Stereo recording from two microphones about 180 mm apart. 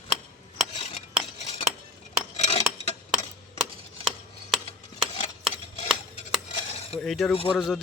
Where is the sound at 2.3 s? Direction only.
35° left (ahead or behind).